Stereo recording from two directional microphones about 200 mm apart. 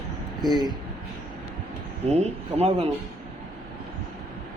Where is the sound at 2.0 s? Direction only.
30° right (ahead or behind).